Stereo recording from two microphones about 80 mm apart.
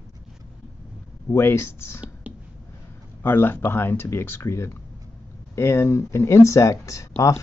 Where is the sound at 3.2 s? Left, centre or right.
Left.